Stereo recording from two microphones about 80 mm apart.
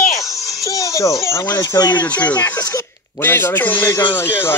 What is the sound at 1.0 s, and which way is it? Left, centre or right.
Speech, left.